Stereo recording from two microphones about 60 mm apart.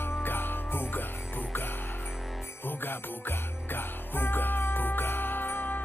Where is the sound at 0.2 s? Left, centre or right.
Left.